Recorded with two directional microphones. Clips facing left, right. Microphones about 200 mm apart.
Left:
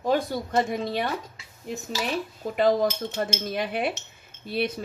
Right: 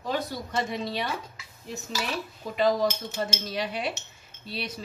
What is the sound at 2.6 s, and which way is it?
Speech, 50° left (ahead or behind).